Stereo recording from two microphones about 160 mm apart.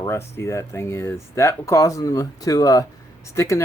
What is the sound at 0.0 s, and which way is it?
Speech, 15° left (ahead or behind).